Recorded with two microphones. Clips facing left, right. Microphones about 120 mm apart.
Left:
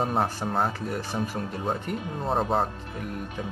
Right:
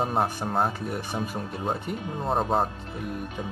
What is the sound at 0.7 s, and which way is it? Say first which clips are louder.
Speech: left 1 dB; 15° right (ahead or behind).